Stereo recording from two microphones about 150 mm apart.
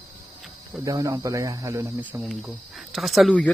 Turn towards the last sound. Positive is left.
turn(degrees=5)  # may be behind; listen again after turning